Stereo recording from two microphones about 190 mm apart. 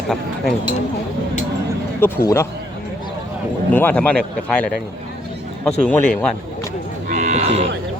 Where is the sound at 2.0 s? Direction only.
10° left (ahead or behind).